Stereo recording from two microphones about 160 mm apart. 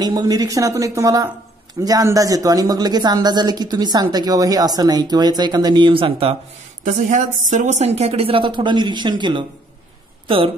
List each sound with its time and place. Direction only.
0.0 s speech: 25° right (ahead or behind)
6.8 s speech: 50° right (ahead or behind); by 10.5 s 35° right (ahead or behind)